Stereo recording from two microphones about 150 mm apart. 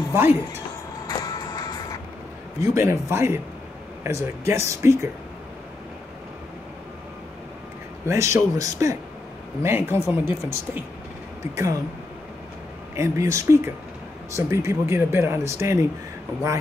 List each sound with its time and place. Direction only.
0.1 s speech: 15° right (ahead or behind)
1.0 s music: 25° left (ahead or behind)
2.6 s speech: 20° right (ahead or behind)
8.1 s speech: 20° right (ahead or behind)
12.9 s speech: 20° right (ahead or behind)